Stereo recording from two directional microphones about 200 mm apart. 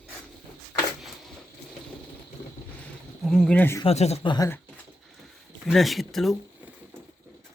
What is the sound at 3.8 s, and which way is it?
Speech, 30° left (ahead or behind).